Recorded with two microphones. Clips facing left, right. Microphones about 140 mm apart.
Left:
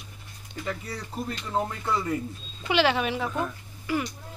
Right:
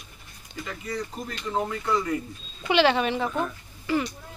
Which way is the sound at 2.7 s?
5° left (ahead or behind).